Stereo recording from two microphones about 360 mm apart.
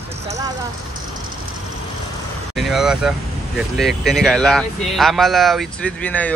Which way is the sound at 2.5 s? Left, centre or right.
Centre.